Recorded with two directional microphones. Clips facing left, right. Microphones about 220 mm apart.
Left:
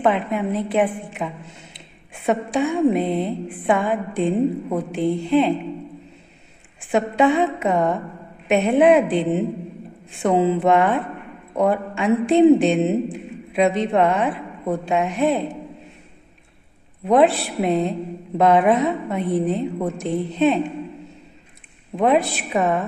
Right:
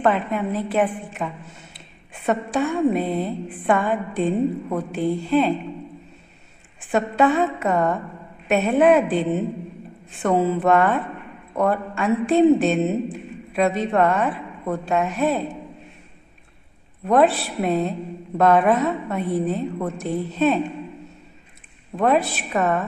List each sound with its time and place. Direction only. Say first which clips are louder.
0.0 s a woman's voice: left 1 dB; 10° left (ahead or behind)
6.9 s a woman's voice: left 1 dB; 15° left (ahead or behind)
17.0 s a woman's voice: left 2 dB; 15° left (ahead or behind)
21.9 s a woman's voice: left 1 dB; 15° left (ahead or behind)